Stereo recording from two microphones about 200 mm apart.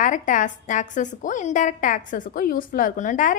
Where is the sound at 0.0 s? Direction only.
40° left (ahead or behind).